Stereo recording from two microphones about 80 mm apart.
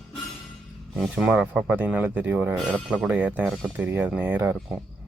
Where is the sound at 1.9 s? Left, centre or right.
Right.